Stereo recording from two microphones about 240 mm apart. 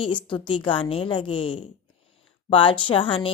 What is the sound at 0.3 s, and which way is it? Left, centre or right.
A woman's voice, left.